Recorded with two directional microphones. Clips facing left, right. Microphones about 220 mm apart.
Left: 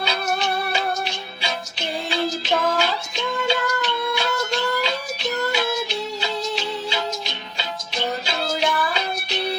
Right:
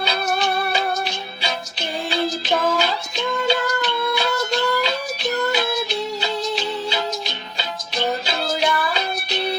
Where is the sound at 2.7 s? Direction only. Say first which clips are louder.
Right 1 dB; 35° right (ahead or behind).